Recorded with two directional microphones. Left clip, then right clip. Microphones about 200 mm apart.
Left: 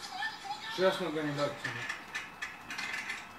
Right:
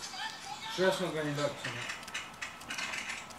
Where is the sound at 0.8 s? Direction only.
35° right (ahead or behind).